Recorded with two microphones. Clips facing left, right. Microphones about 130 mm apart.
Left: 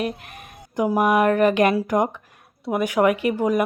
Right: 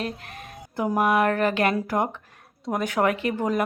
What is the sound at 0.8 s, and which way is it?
Speech, 15° left (ahead or behind).